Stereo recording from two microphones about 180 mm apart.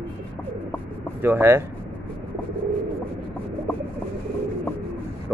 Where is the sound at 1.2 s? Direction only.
10° right (ahead or behind).